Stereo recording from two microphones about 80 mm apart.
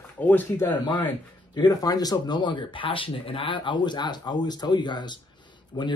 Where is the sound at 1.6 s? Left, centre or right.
Left.